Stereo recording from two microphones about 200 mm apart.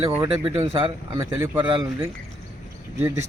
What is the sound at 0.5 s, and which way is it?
Speech, 25° right (ahead or behind).